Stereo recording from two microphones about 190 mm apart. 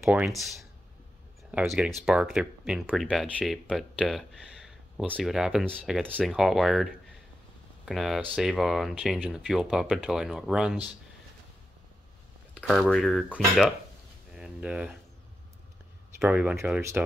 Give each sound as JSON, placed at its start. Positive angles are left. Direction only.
{"t": 0.0, "sound": "speech", "side_deg": -5}
{"t": 1.5, "sound": "speech", "side_deg": -5}
{"t": 12.5, "sound": "speech", "side_deg": 0}
{"t": 14.3, "sound": "a sound", "side_deg": -5}
{"t": 16.2, "sound": "speech", "side_deg": -10}